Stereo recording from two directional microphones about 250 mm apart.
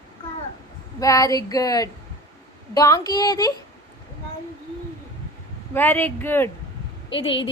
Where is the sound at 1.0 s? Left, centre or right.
Centre.